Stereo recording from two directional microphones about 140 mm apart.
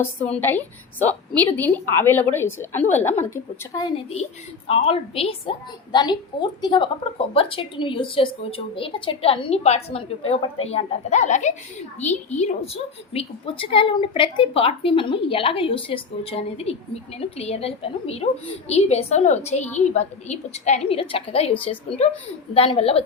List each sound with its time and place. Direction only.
0.2 s a woman's voice: 10° left (ahead or behind)
4.7 s a woman's voice: 40° left (ahead or behind)